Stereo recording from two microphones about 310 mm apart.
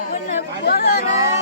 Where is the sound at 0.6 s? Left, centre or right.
Left.